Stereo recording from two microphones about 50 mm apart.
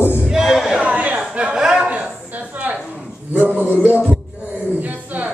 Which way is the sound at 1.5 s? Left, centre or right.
Centre.